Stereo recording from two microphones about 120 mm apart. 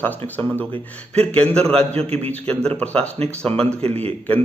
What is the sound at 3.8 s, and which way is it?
Speech, 55° right (ahead or behind).